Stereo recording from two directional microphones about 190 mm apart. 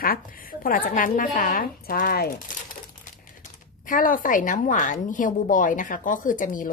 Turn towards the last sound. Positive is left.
turn(degrees=45)  # may be behind; listen again after turning